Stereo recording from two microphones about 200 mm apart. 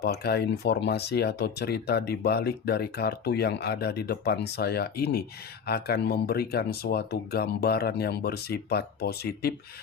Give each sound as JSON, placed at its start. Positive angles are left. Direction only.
{"t": 0.0, "sound": "speech", "side_deg": 50}